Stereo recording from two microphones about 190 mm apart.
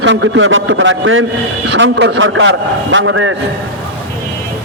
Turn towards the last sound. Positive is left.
turn(degrees=-90)